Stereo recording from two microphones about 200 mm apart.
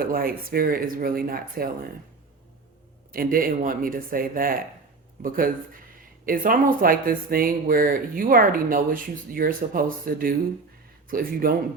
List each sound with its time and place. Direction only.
0.0 s speech: 45° right (ahead or behind)
3.1 s speech: 45° right (ahead or behind)